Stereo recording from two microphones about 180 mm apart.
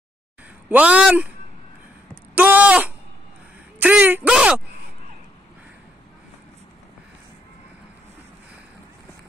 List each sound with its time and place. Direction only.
0.7 s speech: 5° right (ahead or behind)
2.3 s speech: 10° right (ahead or behind)